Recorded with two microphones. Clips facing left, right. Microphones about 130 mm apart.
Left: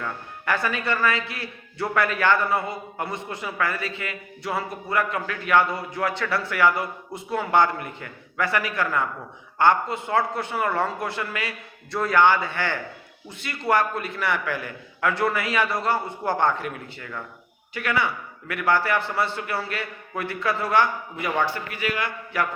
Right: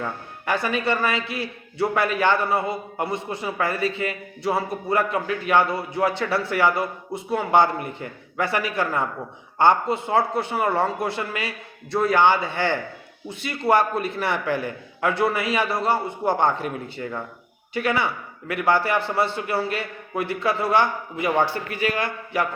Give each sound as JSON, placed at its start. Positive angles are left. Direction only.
{"t": 0.0, "sound": "a man's voice", "side_deg": -25}